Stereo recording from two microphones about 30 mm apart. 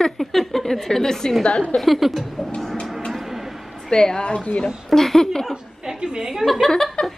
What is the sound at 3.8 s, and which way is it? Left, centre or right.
Speech, left.